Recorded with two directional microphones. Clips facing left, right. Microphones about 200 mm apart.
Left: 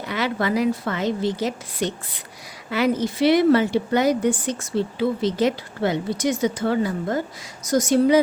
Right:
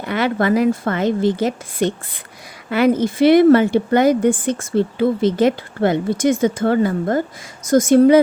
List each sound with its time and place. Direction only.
0.0 s a woman's voice: 55° right (ahead or behind)